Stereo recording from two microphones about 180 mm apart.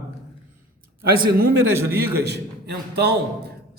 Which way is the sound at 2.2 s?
65° right (ahead or behind).